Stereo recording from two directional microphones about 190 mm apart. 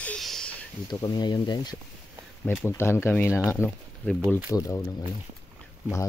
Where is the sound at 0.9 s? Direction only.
20° left (ahead or behind).